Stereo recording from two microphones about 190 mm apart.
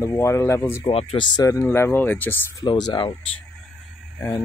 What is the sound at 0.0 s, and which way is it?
Speech, 15° left (ahead or behind).